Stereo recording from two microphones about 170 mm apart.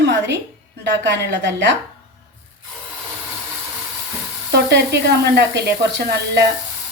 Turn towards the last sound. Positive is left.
turn(degrees=-75)  # may be behind; listen again after turning